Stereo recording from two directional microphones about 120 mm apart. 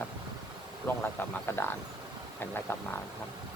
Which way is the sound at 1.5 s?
20° left (ahead or behind).